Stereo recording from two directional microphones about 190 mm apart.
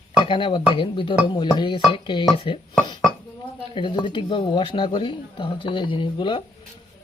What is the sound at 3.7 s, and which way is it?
Speech, 25° left (ahead or behind).